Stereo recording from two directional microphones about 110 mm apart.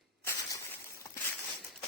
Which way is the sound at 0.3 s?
25° left (ahead or behind).